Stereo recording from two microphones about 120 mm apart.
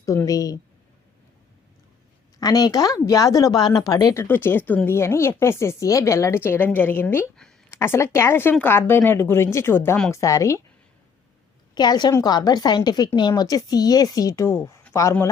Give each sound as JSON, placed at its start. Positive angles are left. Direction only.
{"t": 0.0, "sound": "speech", "side_deg": 25}
{"t": 2.4, "sound": "a woman's voice", "side_deg": 30}
{"t": 11.7, "sound": "a woman's voice", "side_deg": 35}